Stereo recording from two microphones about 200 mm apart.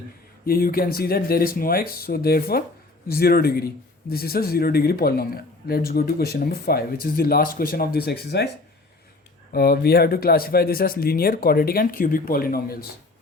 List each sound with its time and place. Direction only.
0.4 s speech: 45° left (ahead or behind)
9.5 s speech: 50° left (ahead or behind)